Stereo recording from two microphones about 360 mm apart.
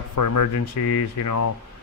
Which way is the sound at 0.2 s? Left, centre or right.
Left.